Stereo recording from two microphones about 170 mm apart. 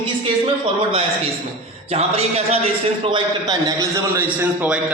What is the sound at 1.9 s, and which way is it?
A man's voice, 35° right (ahead or behind).